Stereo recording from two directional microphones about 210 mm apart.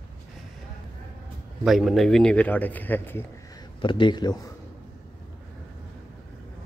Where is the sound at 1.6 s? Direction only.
Centre (ahead or behind).